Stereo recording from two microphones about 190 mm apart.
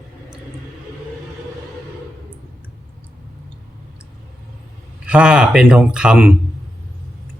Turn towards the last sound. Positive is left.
turn(degrees=-5)  # may be behind; listen again after turning